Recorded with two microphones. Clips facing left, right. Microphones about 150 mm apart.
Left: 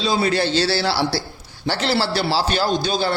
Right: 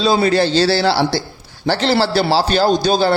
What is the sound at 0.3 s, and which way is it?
A man's voice, 30° right (ahead or behind).